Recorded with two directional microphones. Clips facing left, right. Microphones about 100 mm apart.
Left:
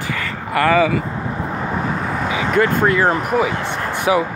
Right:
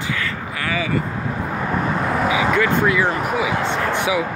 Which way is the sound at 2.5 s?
Centre (ahead or behind).